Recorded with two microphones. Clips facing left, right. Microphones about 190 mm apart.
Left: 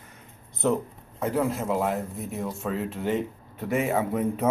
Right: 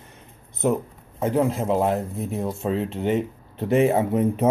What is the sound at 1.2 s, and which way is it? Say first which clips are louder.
Speech: right 4 dB; 25° right (ahead or behind).